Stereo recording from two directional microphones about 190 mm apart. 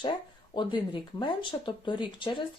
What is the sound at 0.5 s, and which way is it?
Speech, 25° left (ahead or behind).